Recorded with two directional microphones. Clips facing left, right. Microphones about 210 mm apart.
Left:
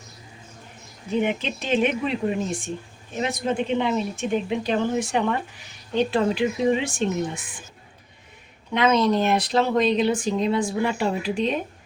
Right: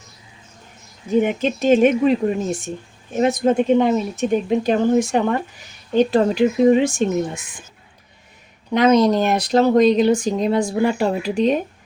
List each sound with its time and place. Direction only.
1.1 s speech: 45° right (ahead or behind)
8.7 s speech: 40° right (ahead or behind)